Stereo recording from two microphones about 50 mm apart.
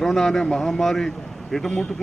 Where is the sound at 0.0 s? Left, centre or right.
Centre.